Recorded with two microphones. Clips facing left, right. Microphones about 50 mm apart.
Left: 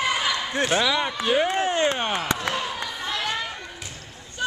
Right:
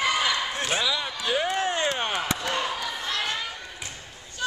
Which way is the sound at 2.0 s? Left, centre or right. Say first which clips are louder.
Left 2 dB; centre.